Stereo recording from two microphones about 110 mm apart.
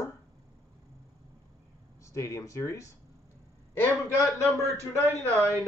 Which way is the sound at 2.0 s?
30° left (ahead or behind).